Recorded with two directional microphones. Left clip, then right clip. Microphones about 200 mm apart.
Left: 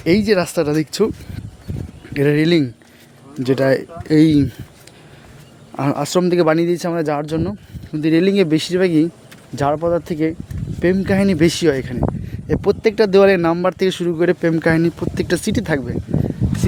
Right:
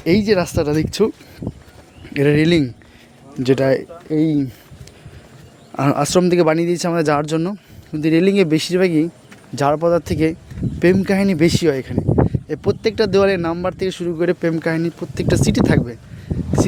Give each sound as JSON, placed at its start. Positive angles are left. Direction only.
{"t": 0.0, "sound": "speech", "side_deg": 0}
{"t": 4.1, "sound": "speech", "side_deg": 20}
{"t": 5.7, "sound": "speech", "side_deg": -10}